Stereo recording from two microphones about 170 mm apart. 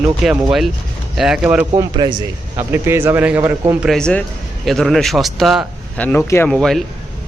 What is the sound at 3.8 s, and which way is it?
Speech, 5° left (ahead or behind).